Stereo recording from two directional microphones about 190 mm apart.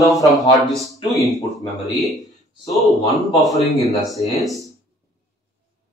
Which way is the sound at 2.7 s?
Centre (ahead or behind).